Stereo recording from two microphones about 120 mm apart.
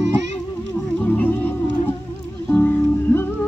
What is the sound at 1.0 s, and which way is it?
Music, 15° left (ahead or behind).